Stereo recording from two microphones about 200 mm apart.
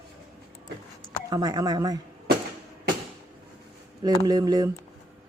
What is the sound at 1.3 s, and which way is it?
Speech, 20° right (ahead or behind).